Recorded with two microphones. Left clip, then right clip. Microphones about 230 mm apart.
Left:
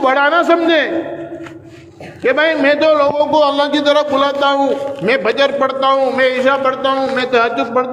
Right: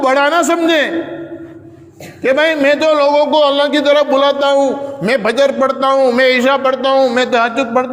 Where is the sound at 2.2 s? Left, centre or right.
Right.